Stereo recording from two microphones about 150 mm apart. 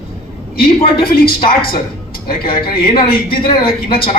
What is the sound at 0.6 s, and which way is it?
Speech, 85° left.